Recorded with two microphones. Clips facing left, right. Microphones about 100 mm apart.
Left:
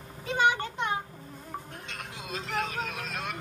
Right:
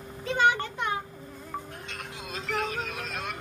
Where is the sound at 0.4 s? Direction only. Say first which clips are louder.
Right 1 dB; 20° left (ahead or behind).